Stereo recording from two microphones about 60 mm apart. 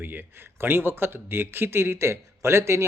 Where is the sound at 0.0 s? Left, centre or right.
Right.